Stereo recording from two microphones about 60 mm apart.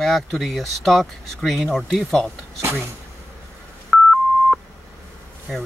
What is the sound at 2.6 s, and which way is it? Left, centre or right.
Speech, right.